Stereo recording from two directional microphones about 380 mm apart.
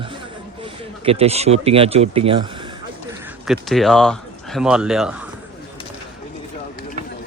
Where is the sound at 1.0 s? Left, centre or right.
Centre.